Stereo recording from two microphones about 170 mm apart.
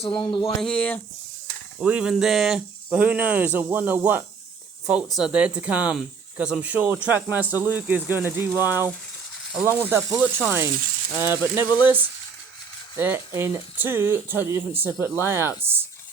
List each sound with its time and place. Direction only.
0.0 s speech: 30° left (ahead or behind)
0.6 s speech: 5° left (ahead or behind)
1.8 s speech: 5° right (ahead or behind)
11.7 s speech: 25° left (ahead or behind)
13.0 s speech: 15° right (ahead or behind)